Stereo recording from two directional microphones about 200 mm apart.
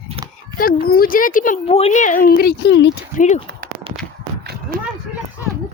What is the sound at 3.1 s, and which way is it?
Speech, 40° left (ahead or behind).